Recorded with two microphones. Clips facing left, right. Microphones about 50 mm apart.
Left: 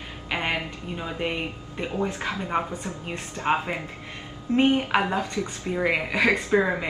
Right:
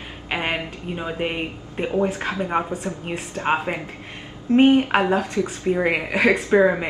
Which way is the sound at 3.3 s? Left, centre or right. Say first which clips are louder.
Right 2 dB; right.